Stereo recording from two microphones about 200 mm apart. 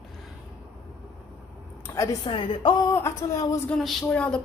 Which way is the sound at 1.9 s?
15° left (ahead or behind).